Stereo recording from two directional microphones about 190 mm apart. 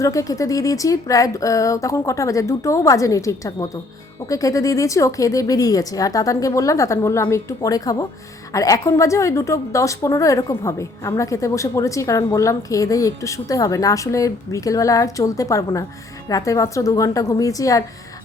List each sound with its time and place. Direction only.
0.0 s a woman's voice: 15° left (ahead or behind)